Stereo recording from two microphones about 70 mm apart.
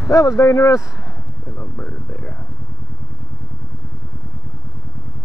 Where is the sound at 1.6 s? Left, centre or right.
Left.